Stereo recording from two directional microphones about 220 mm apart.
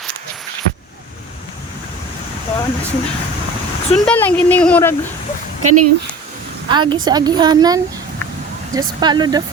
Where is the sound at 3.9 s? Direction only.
5° left (ahead or behind).